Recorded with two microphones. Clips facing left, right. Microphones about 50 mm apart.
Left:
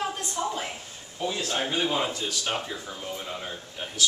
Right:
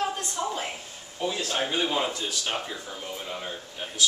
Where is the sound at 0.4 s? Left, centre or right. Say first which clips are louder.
Left 1 dB; centre.